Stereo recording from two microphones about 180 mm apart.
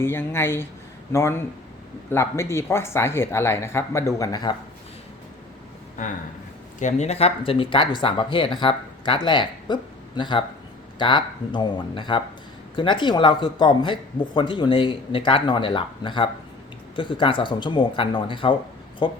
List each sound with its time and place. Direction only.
0.0 s speech: 15° left (ahead or behind)
6.7 s speech: 40° left (ahead or behind)